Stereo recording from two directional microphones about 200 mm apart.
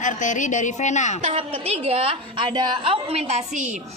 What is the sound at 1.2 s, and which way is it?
A woman's voice, 30° right (ahead or behind).